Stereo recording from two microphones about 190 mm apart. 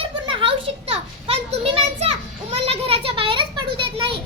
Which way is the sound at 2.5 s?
30° right (ahead or behind).